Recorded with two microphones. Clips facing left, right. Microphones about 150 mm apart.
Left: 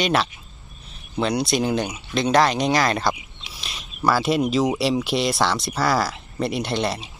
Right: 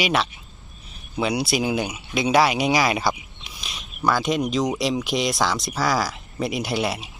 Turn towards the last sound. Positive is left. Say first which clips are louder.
# left 1 dB
turn(degrees=-5)  # may be behind; listen again after turning